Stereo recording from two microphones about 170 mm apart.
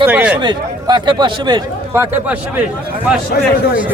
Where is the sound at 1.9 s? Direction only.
15° right (ahead or behind).